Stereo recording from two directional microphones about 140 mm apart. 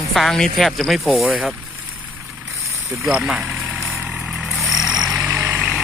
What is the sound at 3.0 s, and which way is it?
Vehicle, centre (ahead or behind).